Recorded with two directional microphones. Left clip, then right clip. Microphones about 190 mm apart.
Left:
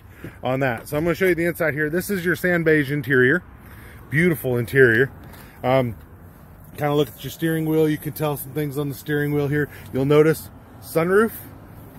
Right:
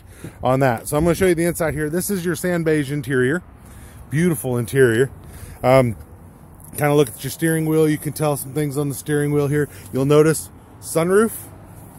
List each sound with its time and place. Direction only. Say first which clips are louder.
0.2 s speech: right 5 dB; 30° right (ahead or behind)
5.6 s speech: right 5 dB; 45° right (ahead or behind); by 11.3 s 15° right (ahead or behind)